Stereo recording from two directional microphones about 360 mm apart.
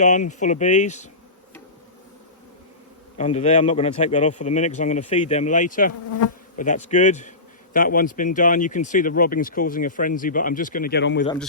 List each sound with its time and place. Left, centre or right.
0.0 s speech: centre
3.2 s speech: centre